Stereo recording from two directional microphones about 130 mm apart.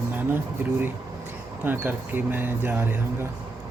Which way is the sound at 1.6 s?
15° right (ahead or behind).